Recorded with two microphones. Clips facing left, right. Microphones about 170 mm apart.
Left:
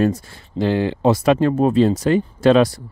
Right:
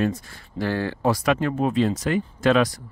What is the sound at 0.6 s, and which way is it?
Speech, 20° left (ahead or behind).